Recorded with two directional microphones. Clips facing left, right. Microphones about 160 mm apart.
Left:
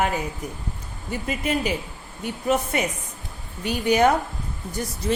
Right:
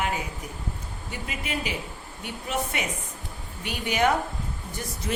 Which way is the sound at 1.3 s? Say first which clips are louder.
Left 8 dB; 40° left (ahead or behind).